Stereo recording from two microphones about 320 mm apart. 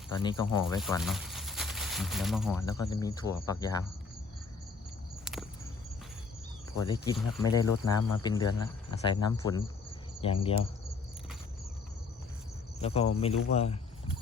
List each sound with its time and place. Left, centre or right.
0.1 s speech: centre
0.8 s speech: centre
2.6 s speech: centre
5.2 s a sound: centre
6.8 s speech: centre
12.8 s speech: centre